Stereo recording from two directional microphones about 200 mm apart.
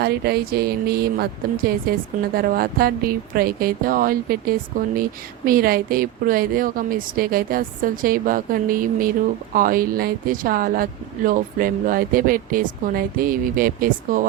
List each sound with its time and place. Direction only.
0.0 s a woman's voice: 50° right (ahead or behind)